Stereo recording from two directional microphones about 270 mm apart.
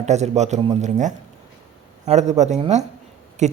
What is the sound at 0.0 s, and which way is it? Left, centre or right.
Speech, right.